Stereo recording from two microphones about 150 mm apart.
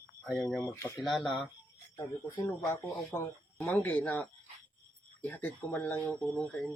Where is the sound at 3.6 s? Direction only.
5° left (ahead or behind).